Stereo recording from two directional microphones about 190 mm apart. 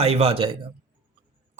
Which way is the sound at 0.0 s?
30° right (ahead or behind).